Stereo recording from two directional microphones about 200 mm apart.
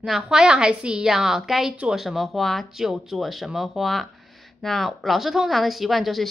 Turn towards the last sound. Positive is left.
turn(degrees=0)  # may be behind; listen again after turning